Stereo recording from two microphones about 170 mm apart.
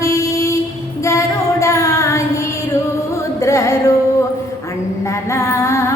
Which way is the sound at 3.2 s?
15° left (ahead or behind).